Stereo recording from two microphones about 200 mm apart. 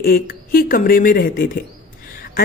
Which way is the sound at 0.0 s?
45° left (ahead or behind).